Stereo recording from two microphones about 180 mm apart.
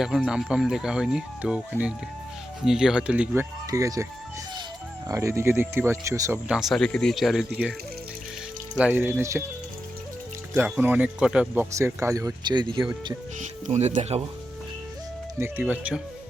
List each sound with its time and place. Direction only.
0.0 s speech: centre (ahead or behind)
3.7 s speech: 20° right (ahead or behind)
5.0 s speech: 15° right (ahead or behind)
6.5 s speech: centre (ahead or behind)
8.7 s speech: 10° right (ahead or behind)
10.5 s speech: 10° right (ahead or behind)
13.4 s speech: 40° right (ahead or behind)
15.4 s speech: 10° right (ahead or behind)